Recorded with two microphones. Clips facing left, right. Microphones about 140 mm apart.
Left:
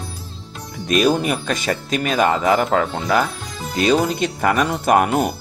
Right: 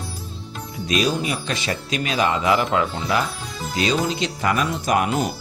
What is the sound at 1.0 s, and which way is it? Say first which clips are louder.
Speech: left 5 dB; 55° left (ahead or behind).